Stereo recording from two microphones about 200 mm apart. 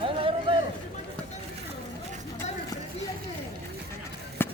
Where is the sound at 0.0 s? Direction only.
25° right (ahead or behind).